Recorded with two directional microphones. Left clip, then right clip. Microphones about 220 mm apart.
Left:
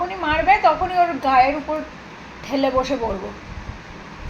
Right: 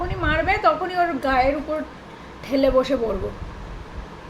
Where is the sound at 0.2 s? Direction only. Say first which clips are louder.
Left 4 dB; 25° right (ahead or behind).